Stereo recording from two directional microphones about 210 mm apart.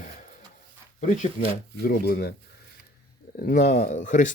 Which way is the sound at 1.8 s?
50° left (ahead or behind).